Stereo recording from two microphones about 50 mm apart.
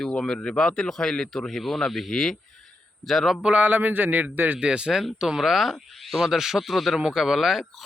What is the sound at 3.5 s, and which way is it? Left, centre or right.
A man's voice, right.